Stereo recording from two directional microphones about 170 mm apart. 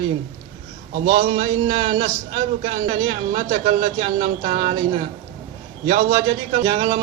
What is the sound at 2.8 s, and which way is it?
A man's voice, 45° right (ahead or behind).